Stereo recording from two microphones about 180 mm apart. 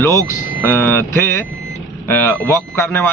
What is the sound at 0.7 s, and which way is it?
Speech, 15° left (ahead or behind).